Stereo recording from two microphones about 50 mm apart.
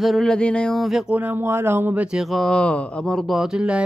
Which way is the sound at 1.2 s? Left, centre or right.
Right.